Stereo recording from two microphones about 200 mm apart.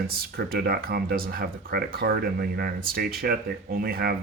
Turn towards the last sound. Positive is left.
turn(degrees=-50)  # may be behind; listen again after turning